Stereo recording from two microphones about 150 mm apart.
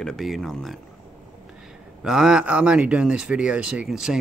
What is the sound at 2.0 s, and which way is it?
Speech, 5° right (ahead or behind).